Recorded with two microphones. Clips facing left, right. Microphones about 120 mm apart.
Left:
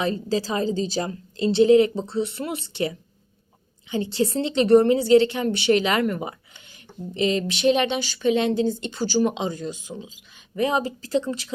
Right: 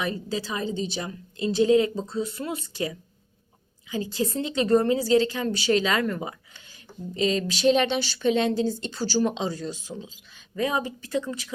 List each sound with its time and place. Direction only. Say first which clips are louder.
0.0 s a woman's voice: left 5 dB; 35° left (ahead or behind); by 10.1 s 15° left (ahead or behind)
10.5 s a woman's voice: left 4 dB; 25° left (ahead or behind)